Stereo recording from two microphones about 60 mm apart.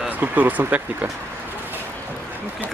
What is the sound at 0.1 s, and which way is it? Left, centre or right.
Speech, right.